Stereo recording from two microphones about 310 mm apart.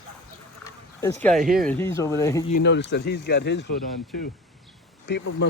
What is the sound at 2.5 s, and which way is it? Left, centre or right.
Speech, left.